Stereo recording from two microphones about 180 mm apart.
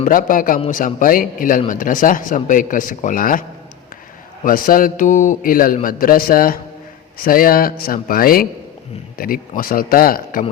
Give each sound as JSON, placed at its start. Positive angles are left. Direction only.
{"t": 0.0, "sound": "speech", "side_deg": 50}
{"t": 4.4, "sound": "speech", "side_deg": 50}